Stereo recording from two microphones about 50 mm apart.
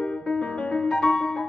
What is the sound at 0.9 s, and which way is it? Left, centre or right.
Music, centre.